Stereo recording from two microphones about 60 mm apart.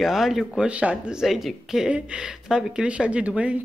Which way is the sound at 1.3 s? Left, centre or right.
Centre.